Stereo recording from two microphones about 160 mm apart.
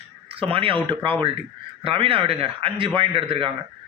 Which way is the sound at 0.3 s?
35° right (ahead or behind).